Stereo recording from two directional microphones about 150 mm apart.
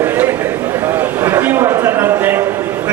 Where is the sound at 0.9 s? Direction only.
15° right (ahead or behind).